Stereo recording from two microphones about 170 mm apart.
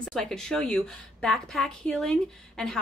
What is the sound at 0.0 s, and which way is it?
A woman's voice, centre (ahead or behind).